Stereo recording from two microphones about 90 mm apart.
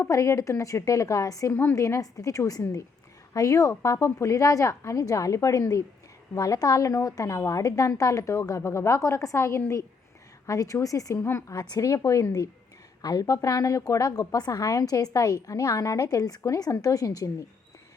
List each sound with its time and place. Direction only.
0.0 s a woman's voice: 35° left (ahead or behind)